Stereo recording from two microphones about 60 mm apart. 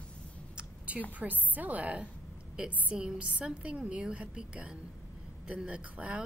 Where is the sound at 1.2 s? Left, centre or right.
Right.